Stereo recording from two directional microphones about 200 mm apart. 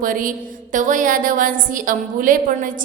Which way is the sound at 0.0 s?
45° right (ahead or behind).